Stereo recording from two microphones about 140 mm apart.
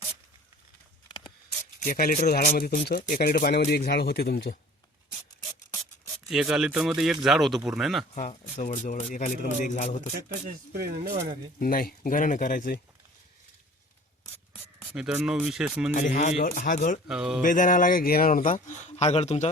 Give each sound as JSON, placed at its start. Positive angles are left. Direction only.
{"t": 1.8, "sound": "speech", "side_deg": 90}
{"t": 6.2, "sound": "speech", "side_deg": -5}
{"t": 8.1, "sound": "speech", "side_deg": 55}
{"t": 10.2, "sound": "speech", "side_deg": -90}
{"t": 11.6, "sound": "speech", "side_deg": 90}
{"t": 14.8, "sound": "music", "side_deg": -5}
{"t": 15.2, "sound": "speech", "side_deg": -5}
{"t": 15.9, "sound": "speech", "side_deg": 60}
{"t": 17.1, "sound": "speech", "side_deg": -5}
{"t": 17.4, "sound": "speech", "side_deg": 70}
{"t": 18.9, "sound": "speech", "side_deg": 50}